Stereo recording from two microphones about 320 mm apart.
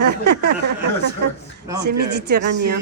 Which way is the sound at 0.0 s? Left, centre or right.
Right.